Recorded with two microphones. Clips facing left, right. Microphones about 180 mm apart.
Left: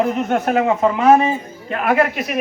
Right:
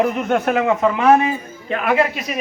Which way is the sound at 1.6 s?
40° left (ahead or behind).